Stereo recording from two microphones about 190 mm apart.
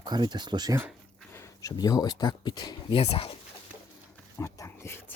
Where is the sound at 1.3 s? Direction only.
15° left (ahead or behind).